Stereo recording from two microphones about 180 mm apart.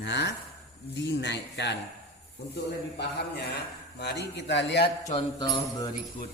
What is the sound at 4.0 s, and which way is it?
Speech, 70° left (ahead or behind).